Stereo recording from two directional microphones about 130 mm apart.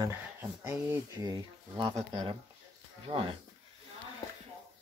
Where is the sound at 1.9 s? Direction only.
45° right (ahead or behind).